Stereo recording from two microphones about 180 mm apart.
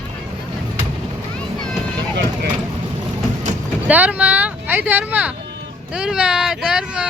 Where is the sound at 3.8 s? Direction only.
10° right (ahead or behind).